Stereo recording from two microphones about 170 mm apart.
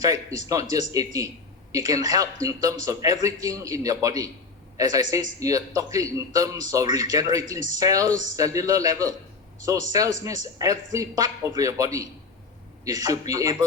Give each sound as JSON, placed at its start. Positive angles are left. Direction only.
{"t": 0.0, "sound": "a man's voice", "side_deg": -20}
{"t": 8.1, "sound": "speech", "side_deg": -50}
{"t": 8.4, "sound": "a man's voice", "side_deg": -20}